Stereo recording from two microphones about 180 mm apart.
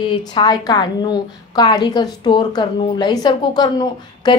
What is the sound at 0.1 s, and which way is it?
A woman's voice, 25° left (ahead or behind).